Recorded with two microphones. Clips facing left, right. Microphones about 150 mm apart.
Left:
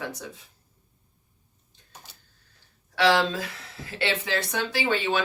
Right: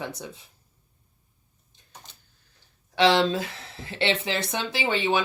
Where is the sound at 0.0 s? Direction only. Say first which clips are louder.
Right 1 dB; 25° right (ahead or behind).